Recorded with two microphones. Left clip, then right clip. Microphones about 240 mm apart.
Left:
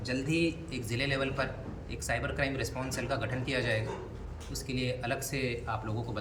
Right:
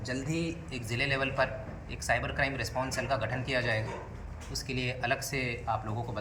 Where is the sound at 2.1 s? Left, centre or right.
Centre.